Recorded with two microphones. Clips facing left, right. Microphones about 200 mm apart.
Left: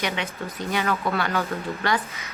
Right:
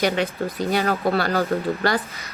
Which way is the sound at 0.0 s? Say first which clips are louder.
Right 7 dB; 35° right (ahead or behind).